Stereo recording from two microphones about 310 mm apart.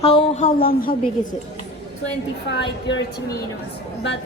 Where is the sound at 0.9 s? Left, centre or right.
Centre.